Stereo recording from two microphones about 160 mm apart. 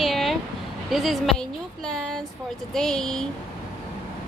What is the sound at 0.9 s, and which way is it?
Speech, centre (ahead or behind).